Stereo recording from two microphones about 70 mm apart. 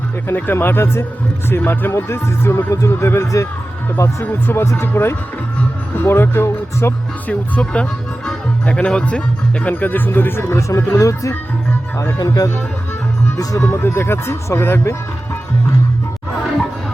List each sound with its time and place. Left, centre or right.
0.3 s speech: left
7.3 s speech: centre
9.6 s speech: left
10.9 s speech: left
13.7 s speech: left